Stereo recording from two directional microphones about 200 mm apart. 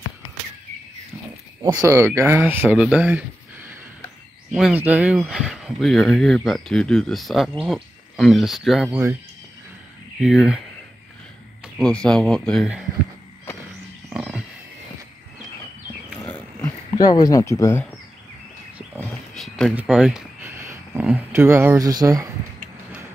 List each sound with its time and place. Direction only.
1.6 s speech: 20° right (ahead or behind); by 9.0 s centre (ahead or behind)
10.2 s speech: centre (ahead or behind)
11.6 s speech: 5° left (ahead or behind)
14.1 s a sound: 5° right (ahead or behind)
16.3 s wild animals: 10° left (ahead or behind)
16.9 s speech: 20° left (ahead or behind)
19.3 s a sound: centre (ahead or behind)
20.6 s speech: 15° right (ahead or behind)